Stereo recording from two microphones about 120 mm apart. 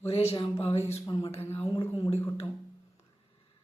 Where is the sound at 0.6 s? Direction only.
60° left (ahead or behind).